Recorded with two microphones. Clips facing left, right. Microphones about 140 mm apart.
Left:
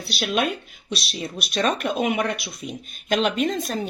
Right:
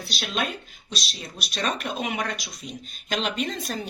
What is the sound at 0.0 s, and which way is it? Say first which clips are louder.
Speech: left 6 dB; 65° left (ahead or behind).